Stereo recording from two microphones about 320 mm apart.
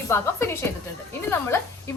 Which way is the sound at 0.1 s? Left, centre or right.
Centre.